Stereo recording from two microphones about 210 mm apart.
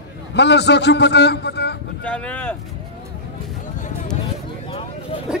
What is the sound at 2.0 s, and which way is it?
Speech, 5° left (ahead or behind).